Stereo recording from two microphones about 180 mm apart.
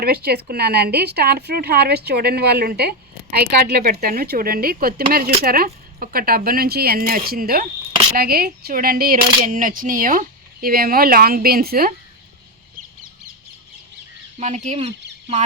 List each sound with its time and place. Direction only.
0.0 s speech: 60° right (ahead or behind)
14.3 s speech: 40° right (ahead or behind)